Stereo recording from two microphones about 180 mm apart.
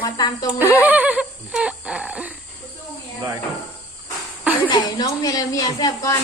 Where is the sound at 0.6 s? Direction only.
10° right (ahead or behind).